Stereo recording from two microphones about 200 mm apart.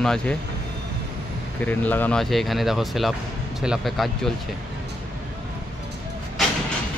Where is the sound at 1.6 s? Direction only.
10° left (ahead or behind).